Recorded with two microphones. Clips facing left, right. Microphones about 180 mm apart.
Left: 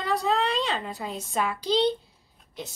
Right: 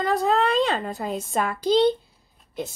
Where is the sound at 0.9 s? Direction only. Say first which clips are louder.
Right 5 dB; 40° right (ahead or behind).